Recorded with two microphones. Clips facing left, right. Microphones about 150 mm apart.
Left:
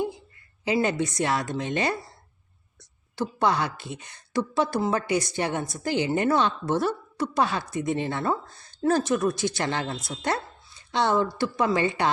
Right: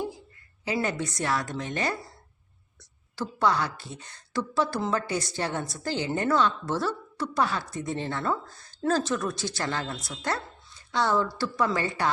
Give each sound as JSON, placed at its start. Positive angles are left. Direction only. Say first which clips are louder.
{"t": 0.6, "sound": "a woman's voice", "louder": "left 4 dB", "side_deg": 20}
{"t": 3.2, "sound": "a woman's voice", "louder": "left 1 dB", "side_deg": 20}